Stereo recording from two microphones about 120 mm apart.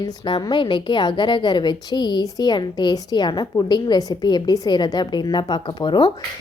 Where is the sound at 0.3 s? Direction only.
40° left (ahead or behind).